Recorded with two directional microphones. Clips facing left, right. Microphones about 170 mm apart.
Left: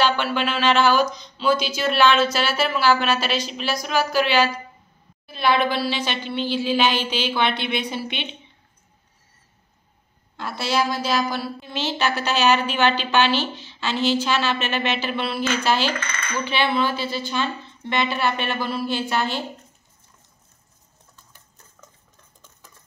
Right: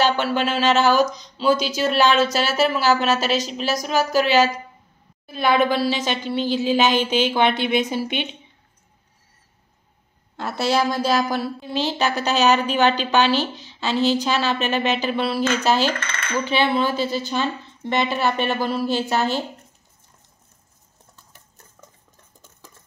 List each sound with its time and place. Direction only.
0.0 s a woman's voice: 40° right (ahead or behind)
10.6 s a woman's voice: 45° right (ahead or behind)
17.0 s a woman's voice: 45° right (ahead or behind)